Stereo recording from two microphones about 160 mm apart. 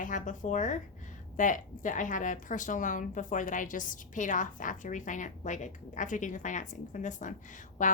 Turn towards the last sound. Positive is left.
turn(degrees=55)  # may be behind; listen again after turning